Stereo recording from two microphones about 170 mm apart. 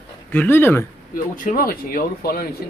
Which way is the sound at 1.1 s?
55° left (ahead or behind).